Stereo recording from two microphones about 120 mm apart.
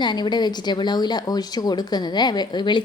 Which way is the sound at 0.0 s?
40° left (ahead or behind).